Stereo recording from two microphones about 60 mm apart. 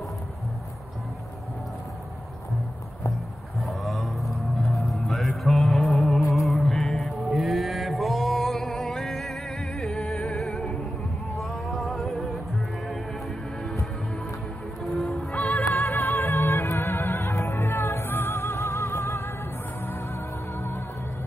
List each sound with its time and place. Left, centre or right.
3.6 s music: centre
7.3 s a sound: centre
11.3 s music: centre
15.0 s music: centre
15.8 s music: left